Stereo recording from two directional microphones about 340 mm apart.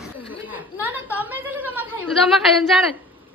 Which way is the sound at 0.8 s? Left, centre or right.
Centre.